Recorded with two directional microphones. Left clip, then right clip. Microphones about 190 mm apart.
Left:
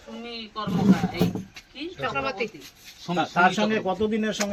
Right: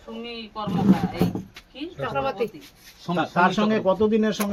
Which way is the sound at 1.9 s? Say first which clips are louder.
Right 2 dB; 45° right (ahead or behind).